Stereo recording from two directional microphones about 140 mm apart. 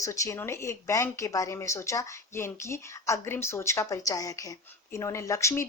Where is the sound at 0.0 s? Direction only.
20° left (ahead or behind).